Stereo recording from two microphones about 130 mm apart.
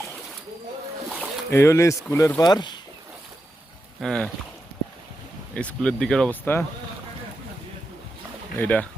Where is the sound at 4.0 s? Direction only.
5° left (ahead or behind).